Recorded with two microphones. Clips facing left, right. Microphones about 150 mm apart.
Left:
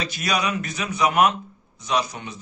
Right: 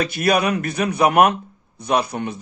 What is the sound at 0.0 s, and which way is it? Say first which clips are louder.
Speech: right 7 dB; 55° right (ahead or behind).